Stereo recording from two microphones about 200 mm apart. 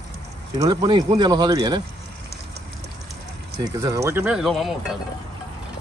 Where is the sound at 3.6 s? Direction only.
15° right (ahead or behind); by 5.0 s centre (ahead or behind).